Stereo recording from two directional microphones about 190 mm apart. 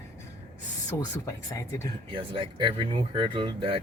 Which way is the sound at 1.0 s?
15° left (ahead or behind).